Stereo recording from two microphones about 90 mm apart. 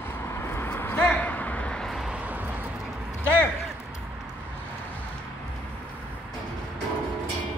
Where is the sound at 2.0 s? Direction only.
15° right (ahead or behind).